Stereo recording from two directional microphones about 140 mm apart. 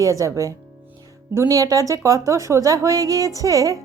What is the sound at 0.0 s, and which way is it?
A woman's voice, 25° right (ahead or behind).